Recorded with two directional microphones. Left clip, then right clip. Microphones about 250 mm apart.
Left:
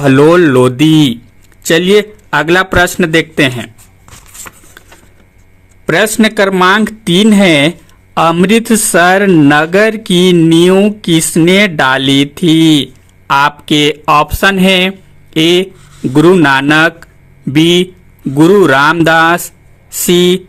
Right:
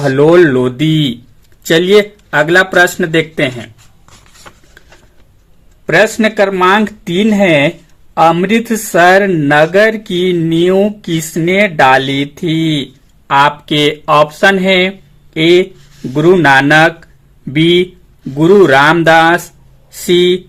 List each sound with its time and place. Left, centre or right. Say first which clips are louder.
0.0 s speech: left 1 dB; left
1.6 s a sound: even; left
5.8 s speech: even; left